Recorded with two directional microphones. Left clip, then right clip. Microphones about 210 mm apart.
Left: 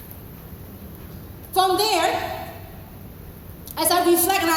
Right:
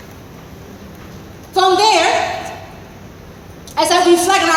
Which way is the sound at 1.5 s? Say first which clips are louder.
Right 8 dB; 35° left (ahead or behind).